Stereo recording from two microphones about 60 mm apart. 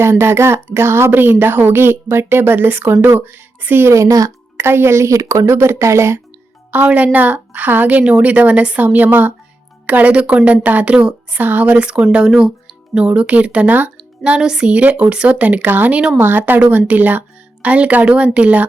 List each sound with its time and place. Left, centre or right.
0.0 s a woman's voice: right
3.8 s speech: right
4.5 s speech: right
6.7 s a woman's voice: right
11.4 s a woman's voice: right
14.3 s a woman's voice: centre; by 16.0 s right
16.0 s a woman's voice: centre
16.2 s a woman's voice: right